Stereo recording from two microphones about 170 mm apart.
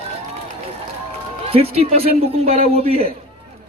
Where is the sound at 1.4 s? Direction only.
35° right (ahead or behind).